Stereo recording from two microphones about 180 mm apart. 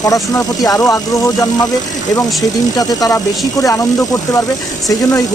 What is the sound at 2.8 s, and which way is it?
Speech, 20° left (ahead or behind).